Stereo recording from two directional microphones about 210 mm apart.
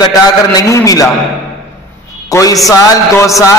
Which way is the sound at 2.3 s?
15° left (ahead or behind).